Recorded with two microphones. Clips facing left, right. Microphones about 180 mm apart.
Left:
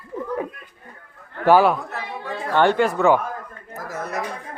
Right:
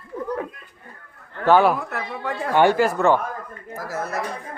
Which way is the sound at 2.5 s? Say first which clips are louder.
Right 1 dB; 10° right (ahead or behind).